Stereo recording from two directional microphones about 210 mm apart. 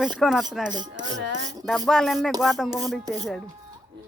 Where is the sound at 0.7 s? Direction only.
20° right (ahead or behind).